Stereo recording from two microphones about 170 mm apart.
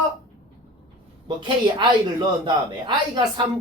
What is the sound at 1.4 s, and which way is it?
Speech, 30° right (ahead or behind).